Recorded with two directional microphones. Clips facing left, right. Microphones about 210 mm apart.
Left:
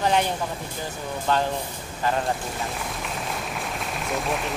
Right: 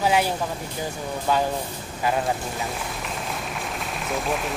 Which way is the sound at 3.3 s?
Centre (ahead or behind).